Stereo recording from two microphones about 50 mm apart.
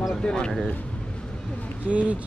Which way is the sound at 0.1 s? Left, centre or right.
Centre.